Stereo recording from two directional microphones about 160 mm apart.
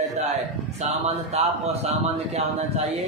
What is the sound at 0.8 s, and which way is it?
A man's voice, 40° right (ahead or behind).